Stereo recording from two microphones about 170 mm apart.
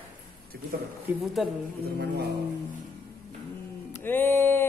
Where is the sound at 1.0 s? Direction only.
Centre (ahead or behind).